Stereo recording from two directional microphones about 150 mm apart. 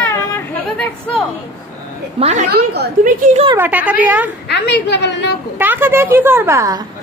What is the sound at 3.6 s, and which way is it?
Speech, 10° right (ahead or behind).